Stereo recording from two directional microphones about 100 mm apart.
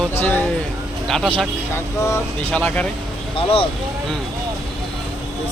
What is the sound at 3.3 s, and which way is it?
Speech, 70° left (ahead or behind).